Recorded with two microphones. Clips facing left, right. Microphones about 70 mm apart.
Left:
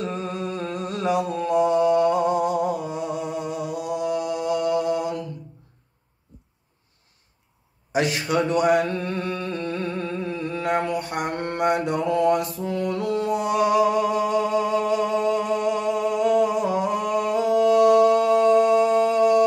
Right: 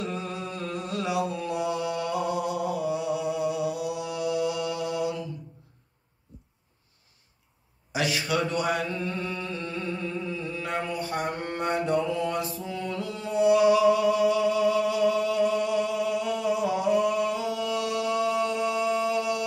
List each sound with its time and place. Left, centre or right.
0.0 s mantra: left
7.9 s mantra: left